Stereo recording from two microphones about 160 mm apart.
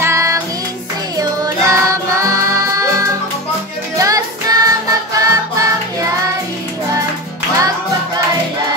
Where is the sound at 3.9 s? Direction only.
20° right (ahead or behind).